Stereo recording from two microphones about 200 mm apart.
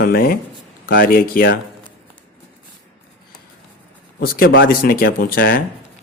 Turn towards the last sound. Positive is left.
turn(degrees=45)  # may be behind; listen again after turning